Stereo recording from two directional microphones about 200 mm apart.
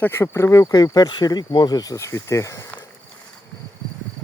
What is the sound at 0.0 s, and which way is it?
Speech, 15° left (ahead or behind).